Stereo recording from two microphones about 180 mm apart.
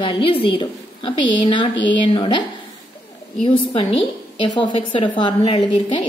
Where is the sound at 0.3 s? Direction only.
30° left (ahead or behind).